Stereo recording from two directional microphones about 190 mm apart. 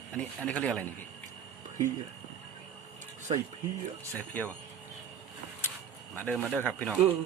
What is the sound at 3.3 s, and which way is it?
Speech, 25° right (ahead or behind).